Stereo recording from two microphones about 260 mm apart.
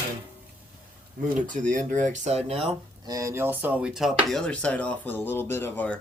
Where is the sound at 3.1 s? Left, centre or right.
Centre.